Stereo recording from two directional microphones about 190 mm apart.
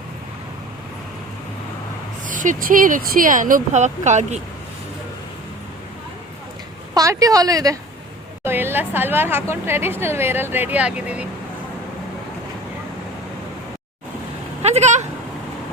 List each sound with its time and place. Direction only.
2.2 s speech: 45° right (ahead or behind)
6.9 s a woman's voice: 20° right (ahead or behind)
14.6 s a sound: 35° right (ahead or behind)